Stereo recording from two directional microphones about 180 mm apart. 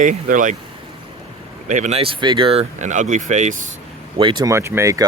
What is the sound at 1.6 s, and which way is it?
Speech, 45° right (ahead or behind).